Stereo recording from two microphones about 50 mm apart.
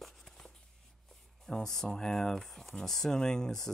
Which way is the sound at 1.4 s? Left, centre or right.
Centre.